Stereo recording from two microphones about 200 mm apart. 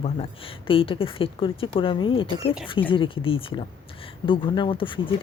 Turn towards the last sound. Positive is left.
turn(degrees=25)  # may be behind; listen again after turning